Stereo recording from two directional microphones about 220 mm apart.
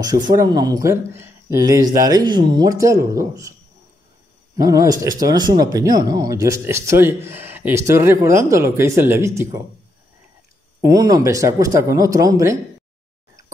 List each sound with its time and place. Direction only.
0.0 s speech: 15° right (ahead or behind)
4.6 s speech: 15° right (ahead or behind)
10.8 s speech: 15° right (ahead or behind)